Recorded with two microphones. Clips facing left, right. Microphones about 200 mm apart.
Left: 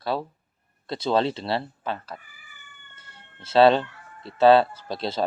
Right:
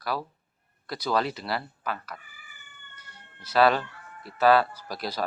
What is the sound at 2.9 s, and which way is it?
Cat, 25° left (ahead or behind).